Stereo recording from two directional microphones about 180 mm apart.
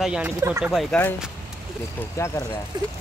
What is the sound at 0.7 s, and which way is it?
Speech, centre (ahead or behind).